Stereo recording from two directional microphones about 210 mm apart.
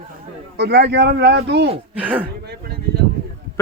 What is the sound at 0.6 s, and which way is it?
Speech, 50° right (ahead or behind).